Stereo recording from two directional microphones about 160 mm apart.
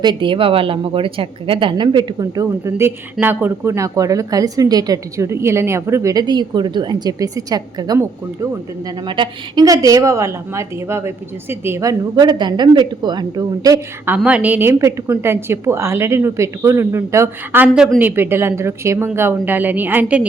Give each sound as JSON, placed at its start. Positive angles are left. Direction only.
{"t": 0.0, "sound": "a woman's voice", "side_deg": -30}
{"t": 14.2, "sound": "a woman's voice", "side_deg": -10}